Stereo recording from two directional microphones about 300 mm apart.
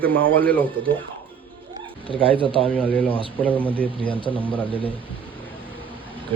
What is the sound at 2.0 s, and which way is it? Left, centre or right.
Speech, centre.